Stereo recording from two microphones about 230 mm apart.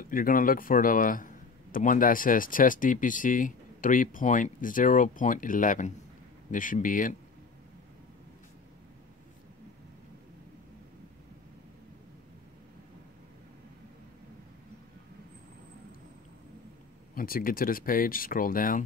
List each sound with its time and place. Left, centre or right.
0.1 s a man's voice: left
17.1 s a man's voice: left